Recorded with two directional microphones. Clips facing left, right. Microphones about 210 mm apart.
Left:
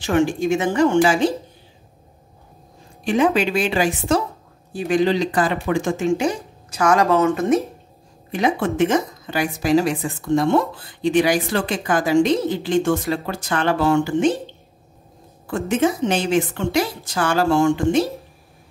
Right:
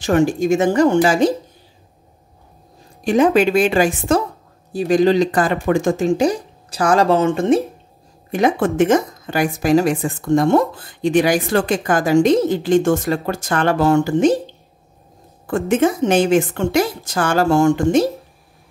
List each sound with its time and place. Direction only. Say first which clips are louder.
0.0 s speech: right 3 dB; 40° right (ahead or behind)
3.0 s a woman's voice: right 4 dB; 40° right (ahead or behind)
8.3 s a woman's voice: right 4 dB; 50° right (ahead or behind)
15.4 s a woman's voice: right 3 dB; 50° right (ahead or behind)